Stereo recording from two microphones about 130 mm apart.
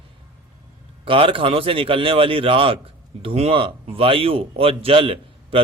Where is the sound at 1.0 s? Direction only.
45° right (ahead or behind).